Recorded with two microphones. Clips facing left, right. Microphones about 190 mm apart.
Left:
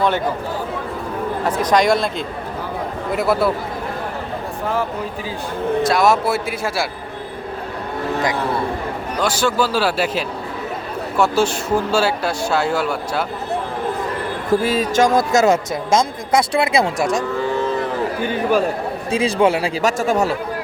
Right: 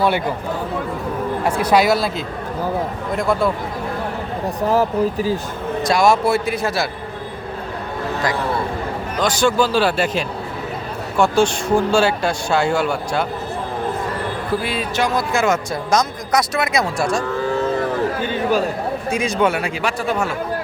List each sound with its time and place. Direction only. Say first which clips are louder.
1.5 s speech: even; 10° right (ahead or behind)
4.7 s speech: right 7 dB; 40° right (ahead or behind)
5.9 s a man's voice: right 4 dB; 5° left (ahead or behind)
9.1 s a man's voice: right 2 dB; 10° left (ahead or behind)
14.6 s speech: left 5 dB; 40° left (ahead or behind)
15.7 s speech: left 1 dB; 25° left (ahead or behind)
17.0 s a man's voice: left 1 dB; 20° left (ahead or behind)
19.1 s speech: left 3 dB; 30° left (ahead or behind)
19.8 s speech: left 5 dB; 45° left (ahead or behind)